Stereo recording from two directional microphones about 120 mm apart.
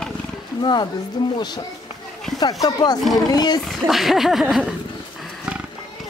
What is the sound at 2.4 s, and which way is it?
Speech, 35° left (ahead or behind).